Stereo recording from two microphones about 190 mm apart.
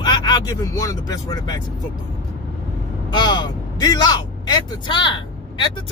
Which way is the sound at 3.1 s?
25° left (ahead or behind).